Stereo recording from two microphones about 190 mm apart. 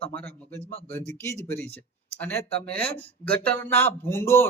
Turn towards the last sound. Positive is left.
turn(degrees=15)  # may be behind; listen again after turning